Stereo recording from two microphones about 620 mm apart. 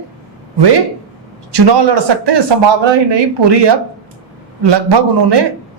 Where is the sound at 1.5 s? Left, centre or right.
Right.